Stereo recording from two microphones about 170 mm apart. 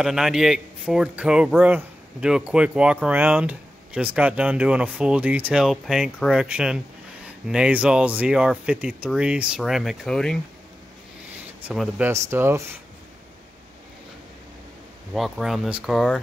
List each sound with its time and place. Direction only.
0.0 s speech: 5° right (ahead or behind)
11.6 s speech: 5° right (ahead or behind)
12.1 s speech: 15° right (ahead or behind)
15.1 s speech: centre (ahead or behind)